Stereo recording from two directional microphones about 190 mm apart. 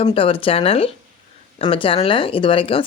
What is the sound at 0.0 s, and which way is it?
Speech, 30° left (ahead or behind).